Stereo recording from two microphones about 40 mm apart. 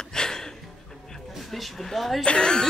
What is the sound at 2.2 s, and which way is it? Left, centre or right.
Speech, left.